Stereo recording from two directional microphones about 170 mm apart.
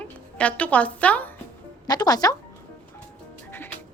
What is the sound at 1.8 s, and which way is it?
Speech, 25° left (ahead or behind).